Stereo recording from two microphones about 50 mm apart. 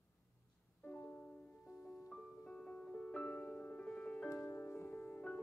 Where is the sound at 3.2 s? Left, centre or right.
Left.